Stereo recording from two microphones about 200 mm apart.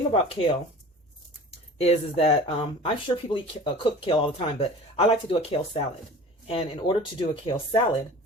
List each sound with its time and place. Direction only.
0.1 s speech: 25° left (ahead or behind)